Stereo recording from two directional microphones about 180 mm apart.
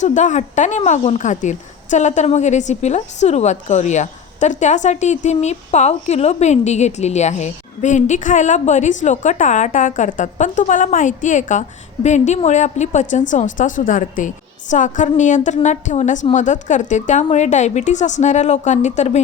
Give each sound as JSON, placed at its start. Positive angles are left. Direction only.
{"t": 0.0, "sound": "a woman's voice", "side_deg": 45}